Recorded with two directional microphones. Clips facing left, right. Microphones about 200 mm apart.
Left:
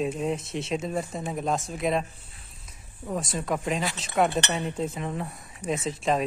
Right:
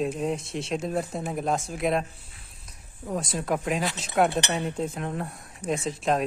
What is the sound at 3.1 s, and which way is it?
Speech, centre (ahead or behind).